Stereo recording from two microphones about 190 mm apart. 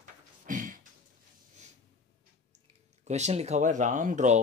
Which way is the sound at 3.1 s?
35° right (ahead or behind).